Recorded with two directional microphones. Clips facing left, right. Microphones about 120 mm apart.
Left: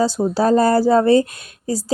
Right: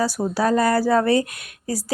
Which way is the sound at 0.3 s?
30° left (ahead or behind).